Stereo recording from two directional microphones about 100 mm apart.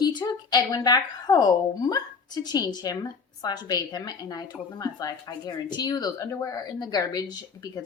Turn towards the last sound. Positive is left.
turn(degrees=40)  # may be behind; listen again after turning